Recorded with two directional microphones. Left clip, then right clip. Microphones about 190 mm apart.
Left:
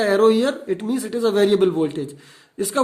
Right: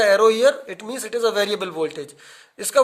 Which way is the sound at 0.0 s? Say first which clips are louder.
Right 2 dB; 30° right (ahead or behind).